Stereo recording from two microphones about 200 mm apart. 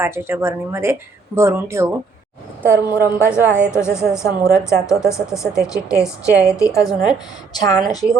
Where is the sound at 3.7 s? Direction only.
15° left (ahead or behind).